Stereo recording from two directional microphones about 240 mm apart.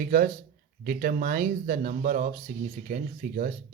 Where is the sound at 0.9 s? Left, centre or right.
Right.